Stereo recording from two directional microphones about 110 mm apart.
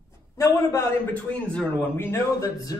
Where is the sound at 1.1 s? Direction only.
10° left (ahead or behind).